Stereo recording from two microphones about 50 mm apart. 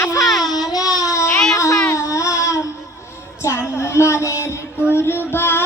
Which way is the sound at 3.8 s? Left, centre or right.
Left.